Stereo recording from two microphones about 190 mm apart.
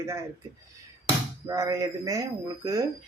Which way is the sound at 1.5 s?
20° right (ahead or behind).